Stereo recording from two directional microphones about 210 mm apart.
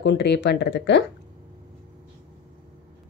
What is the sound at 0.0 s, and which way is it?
A woman's voice, 55° left (ahead or behind).